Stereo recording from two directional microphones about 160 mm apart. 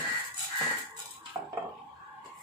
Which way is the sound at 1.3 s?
15° right (ahead or behind).